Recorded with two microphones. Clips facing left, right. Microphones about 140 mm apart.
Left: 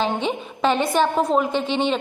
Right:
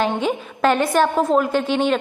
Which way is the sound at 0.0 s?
5° right (ahead or behind).